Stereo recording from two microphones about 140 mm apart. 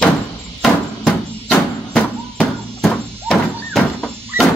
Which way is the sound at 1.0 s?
5° left (ahead or behind).